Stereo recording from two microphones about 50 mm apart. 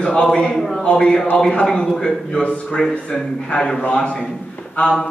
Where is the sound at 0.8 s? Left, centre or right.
Centre.